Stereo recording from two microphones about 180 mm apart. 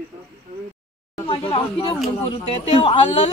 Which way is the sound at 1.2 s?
30° left (ahead or behind).